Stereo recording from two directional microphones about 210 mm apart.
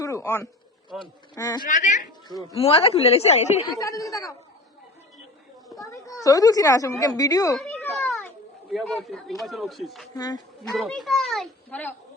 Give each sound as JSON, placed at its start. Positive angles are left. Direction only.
{"t": 0.0, "sound": "a sound", "side_deg": 15}
{"t": 0.9, "sound": "a woman's voice", "side_deg": 20}
{"t": 1.6, "sound": "a woman's voice", "side_deg": 35}
{"t": 3.8, "sound": "speech", "side_deg": 15}
{"t": 5.9, "sound": "a woman's voice", "side_deg": 15}
{"t": 7.6, "sound": "a sound", "side_deg": 5}
{"t": 8.7, "sound": "speech", "side_deg": 0}
{"t": 10.2, "sound": "a woman's voice", "side_deg": 20}
{"t": 10.8, "sound": "speech", "side_deg": 0}